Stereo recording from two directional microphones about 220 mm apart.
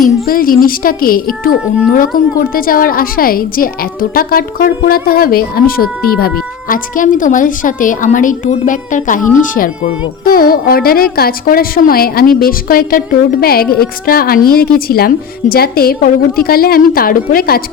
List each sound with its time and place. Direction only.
0.3 s speech: 40° left (ahead or behind)
10.3 s a woman's voice: 40° left (ahead or behind)